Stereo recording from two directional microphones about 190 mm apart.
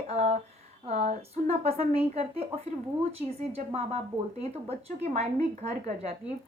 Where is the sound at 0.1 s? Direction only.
35° right (ahead or behind).